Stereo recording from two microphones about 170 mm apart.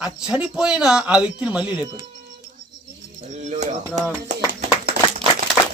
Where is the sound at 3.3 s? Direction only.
45° right (ahead or behind).